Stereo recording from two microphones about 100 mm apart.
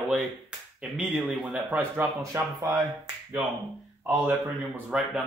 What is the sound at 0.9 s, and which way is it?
Speech, 15° right (ahead or behind).